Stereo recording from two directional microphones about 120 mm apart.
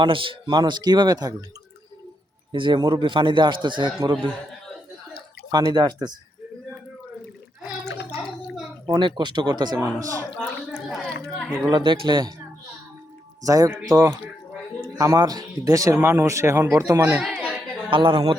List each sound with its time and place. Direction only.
0.0 s a man's voice: 45° right (ahead or behind)
2.5 s a man's voice: 40° right (ahead or behind)
5.5 s a man's voice: 35° right (ahead or behind)
8.2 s gargling: centre (ahead or behind)
8.9 s a man's voice: 40° right (ahead or behind)
9.8 s speech: 25° right (ahead or behind)
10.8 s a sound: 5° left (ahead or behind)
11.7 s a man's voice: 40° right (ahead or behind)
13.4 s speech: 30° right (ahead or behind)
13.9 s speech: 20° right (ahead or behind)
14.9 s speech: 30° right (ahead or behind)
17.2 s speech: 5° right (ahead or behind)
17.9 s a man's voice: 45° right (ahead or behind)